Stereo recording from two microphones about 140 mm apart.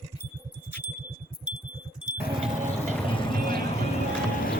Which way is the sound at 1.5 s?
5° right (ahead or behind).